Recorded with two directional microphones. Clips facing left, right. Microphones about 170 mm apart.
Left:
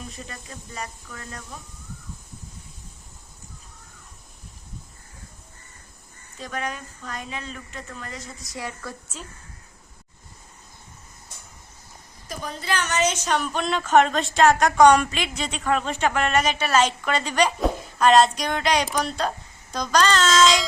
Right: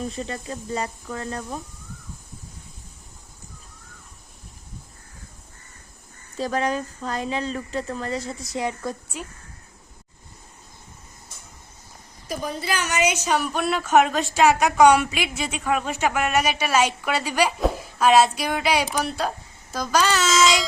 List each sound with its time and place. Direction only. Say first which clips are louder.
0.2 s speech: right 9 dB; 30° right (ahead or behind)
6.3 s speech: right 8 dB; 35° right (ahead or behind)
12.5 s a woman's voice: left 1 dB; 10° right (ahead or behind)